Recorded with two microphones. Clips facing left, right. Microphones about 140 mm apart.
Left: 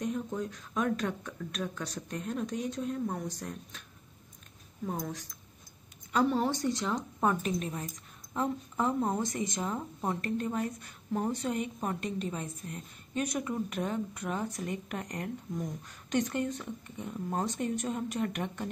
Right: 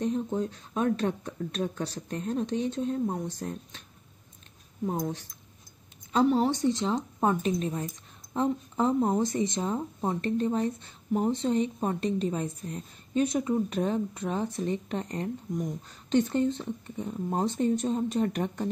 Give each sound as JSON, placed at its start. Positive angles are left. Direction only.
{"t": 0.0, "sound": "speech", "side_deg": -30}
{"t": 4.8, "sound": "speech", "side_deg": -25}
{"t": 6.4, "sound": "speech", "side_deg": -20}